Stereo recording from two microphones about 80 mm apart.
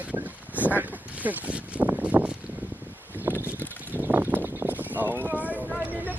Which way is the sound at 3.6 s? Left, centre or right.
Right.